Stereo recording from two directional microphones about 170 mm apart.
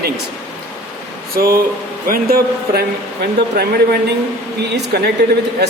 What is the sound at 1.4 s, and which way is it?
A man's voice, 60° right (ahead or behind).